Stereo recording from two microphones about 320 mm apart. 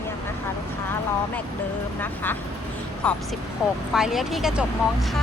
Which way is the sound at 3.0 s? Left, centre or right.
Centre.